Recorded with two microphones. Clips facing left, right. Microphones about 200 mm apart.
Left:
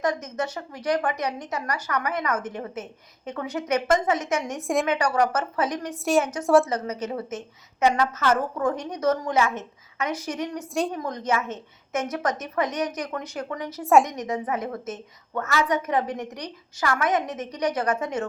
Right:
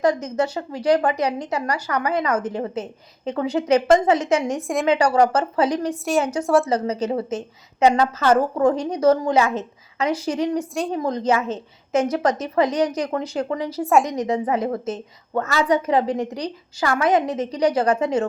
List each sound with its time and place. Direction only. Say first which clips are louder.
0.0 s a woman's voice: right 6 dB; 30° right (ahead or behind)
4.6 s a woman's voice: even; centre (ahead or behind)
4.9 s speech: right 10 dB; 30° right (ahead or behind)
6.4 s a woman's voice: left 1 dB; centre (ahead or behind)
6.7 s a woman's voice: right 6 dB; 30° right (ahead or behind)
13.8 s a woman's voice: even; centre (ahead or behind)
14.1 s a woman's voice: right 6 dB; 30° right (ahead or behind)